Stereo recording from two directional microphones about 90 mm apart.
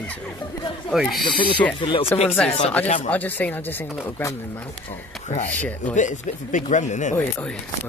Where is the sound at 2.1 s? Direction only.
20° left (ahead or behind).